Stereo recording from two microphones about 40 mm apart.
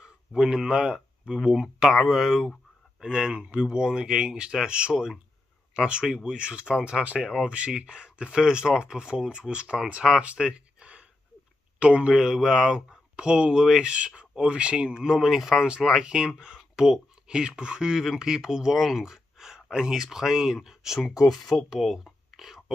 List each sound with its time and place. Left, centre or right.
0.0 s speech: centre
0.9 s speech: centre
10.3 s a sound: right
11.8 s speech: right
12.1 s speech: centre
13.9 s speech: right
15.0 s speech: centre
17.4 s speech: right
21.3 s speech: centre
21.5 s speech: centre